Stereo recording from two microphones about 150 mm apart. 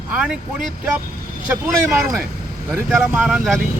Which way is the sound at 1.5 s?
15° right (ahead or behind).